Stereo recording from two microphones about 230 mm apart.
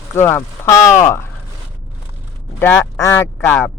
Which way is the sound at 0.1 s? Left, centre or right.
Centre.